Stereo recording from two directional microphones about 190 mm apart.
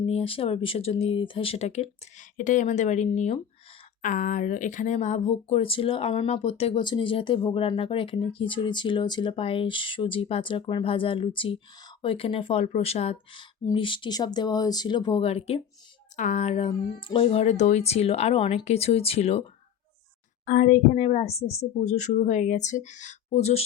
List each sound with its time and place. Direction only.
0.0 s speech: 30° left (ahead or behind)
20.4 s speech: 45° left (ahead or behind)